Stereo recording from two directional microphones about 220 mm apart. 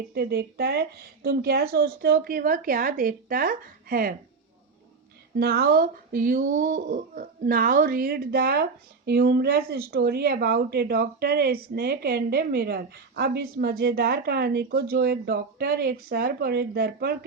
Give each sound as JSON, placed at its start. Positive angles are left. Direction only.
{"t": 0.1, "sound": "speech", "side_deg": -45}
{"t": 5.4, "sound": "speech", "side_deg": -45}